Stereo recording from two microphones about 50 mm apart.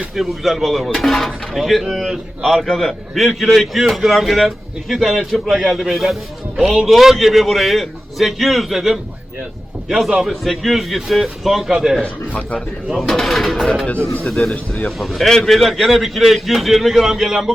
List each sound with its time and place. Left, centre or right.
0.2 s a man's voice: centre
12.0 s speech: left
12.9 s a man's voice: centre